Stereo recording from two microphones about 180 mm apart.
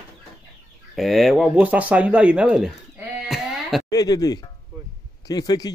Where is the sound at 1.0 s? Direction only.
Centre (ahead or behind).